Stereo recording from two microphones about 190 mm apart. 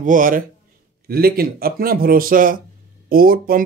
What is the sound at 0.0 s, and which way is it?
Speech, 45° right (ahead or behind).